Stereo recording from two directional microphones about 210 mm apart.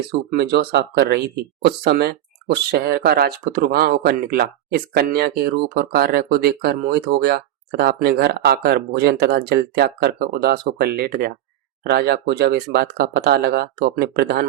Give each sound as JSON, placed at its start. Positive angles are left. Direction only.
{"t": 0.3, "sound": "speech", "side_deg": -45}